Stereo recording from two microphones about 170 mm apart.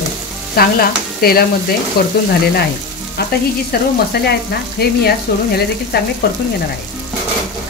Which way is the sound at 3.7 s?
65° left (ahead or behind).